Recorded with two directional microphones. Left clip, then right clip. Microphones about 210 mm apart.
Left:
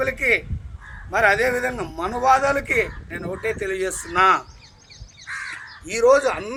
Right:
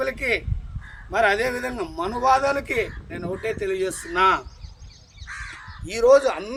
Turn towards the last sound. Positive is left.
turn(degrees=5)  # may be behind; listen again after turning